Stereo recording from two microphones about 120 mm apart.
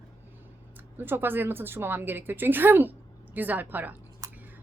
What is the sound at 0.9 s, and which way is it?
A woman's voice, 15° right (ahead or behind).